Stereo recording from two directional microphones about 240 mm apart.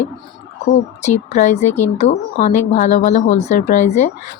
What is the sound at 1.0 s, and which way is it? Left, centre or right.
A woman's voice, left.